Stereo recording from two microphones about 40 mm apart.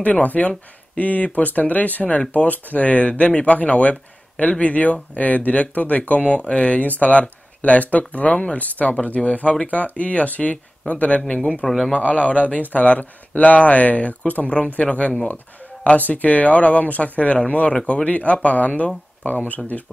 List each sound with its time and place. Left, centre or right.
0.0 s speech: left
11.6 s speech: centre
11.9 s speech: left